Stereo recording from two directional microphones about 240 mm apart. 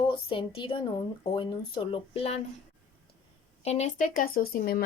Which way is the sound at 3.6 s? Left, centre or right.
Left.